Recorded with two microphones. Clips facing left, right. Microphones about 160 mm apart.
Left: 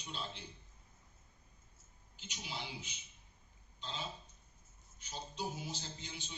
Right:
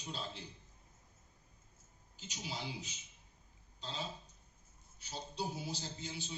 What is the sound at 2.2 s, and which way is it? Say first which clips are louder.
A man's voice: right 2 dB; 40° right (ahead or behind).